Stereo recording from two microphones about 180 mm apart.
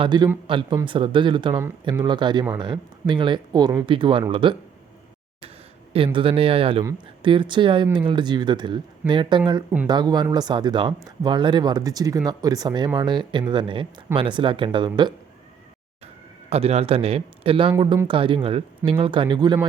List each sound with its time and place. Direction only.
0.0 s speech: 25° right (ahead or behind)
6.1 s a man's voice: 30° right (ahead or behind)
16.5 s a man's voice: 35° right (ahead or behind)